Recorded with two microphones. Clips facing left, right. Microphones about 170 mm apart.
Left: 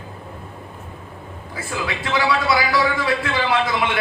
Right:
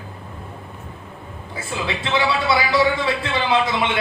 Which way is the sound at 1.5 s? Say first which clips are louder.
Even; 25° right (ahead or behind).